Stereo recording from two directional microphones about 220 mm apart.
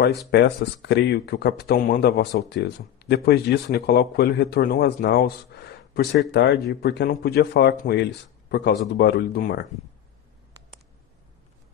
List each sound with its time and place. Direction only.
0.3 s speech: 50° left (ahead or behind)